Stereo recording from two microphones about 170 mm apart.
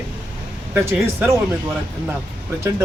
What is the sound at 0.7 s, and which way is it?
Speech, 15° right (ahead or behind).